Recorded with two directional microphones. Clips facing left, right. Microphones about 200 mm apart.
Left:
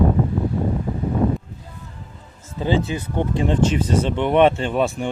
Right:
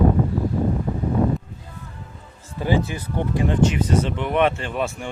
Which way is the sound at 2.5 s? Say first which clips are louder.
Left 1 dB; 20° left (ahead or behind).